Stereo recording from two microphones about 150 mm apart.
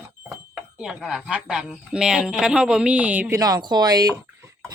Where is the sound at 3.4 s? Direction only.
25° right (ahead or behind).